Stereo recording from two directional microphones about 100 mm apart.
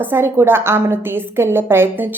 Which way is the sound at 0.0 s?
20° right (ahead or behind).